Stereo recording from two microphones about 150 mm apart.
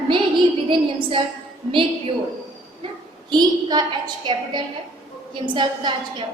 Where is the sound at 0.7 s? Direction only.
35° right (ahead or behind).